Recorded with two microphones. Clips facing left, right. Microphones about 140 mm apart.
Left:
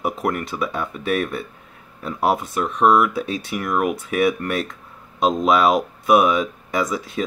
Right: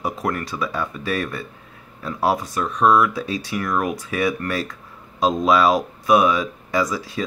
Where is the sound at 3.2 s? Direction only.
55° left (ahead or behind).